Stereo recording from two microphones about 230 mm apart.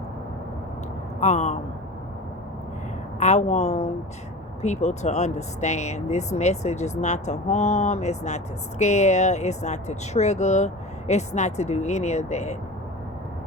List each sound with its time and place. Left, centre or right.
1.2 s speech: left
3.2 s speech: left